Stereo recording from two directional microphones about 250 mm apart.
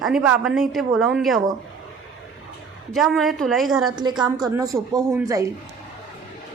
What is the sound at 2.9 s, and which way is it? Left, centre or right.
Speech, centre.